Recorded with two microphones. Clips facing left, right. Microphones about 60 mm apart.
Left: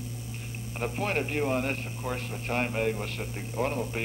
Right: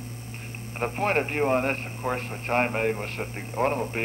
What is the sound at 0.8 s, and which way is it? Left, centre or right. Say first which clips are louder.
A man's voice: right 5 dB; right.